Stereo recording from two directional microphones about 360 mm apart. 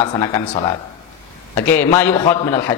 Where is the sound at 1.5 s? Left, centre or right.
Centre.